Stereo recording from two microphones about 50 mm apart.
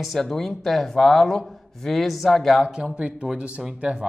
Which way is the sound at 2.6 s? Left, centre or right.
Centre.